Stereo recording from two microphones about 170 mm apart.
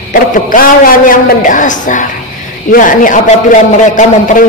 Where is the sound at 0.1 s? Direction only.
50° left (ahead or behind).